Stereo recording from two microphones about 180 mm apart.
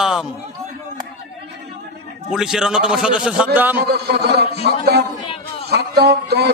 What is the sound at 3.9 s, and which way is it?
A man's voice, 60° right (ahead or behind).